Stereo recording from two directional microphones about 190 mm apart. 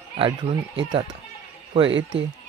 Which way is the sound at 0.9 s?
25° right (ahead or behind).